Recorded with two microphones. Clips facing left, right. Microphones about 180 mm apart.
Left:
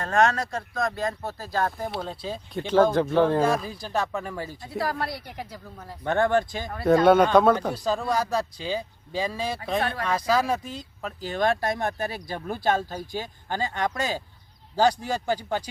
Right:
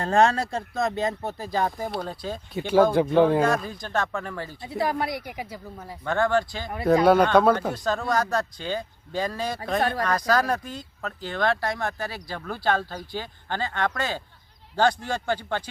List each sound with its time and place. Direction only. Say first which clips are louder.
0.0 s speech: right 2 dB; 30° right (ahead or behind)
1.8 s speech: right 1 dB; centre (ahead or behind)
3.4 s speech: even; 5° left (ahead or behind)
4.8 s speech: right 3 dB; 20° right (ahead or behind)
6.1 s speech: left 1 dB; 20° left (ahead or behind)
6.8 s speech: left 1 dB; centre (ahead or behind)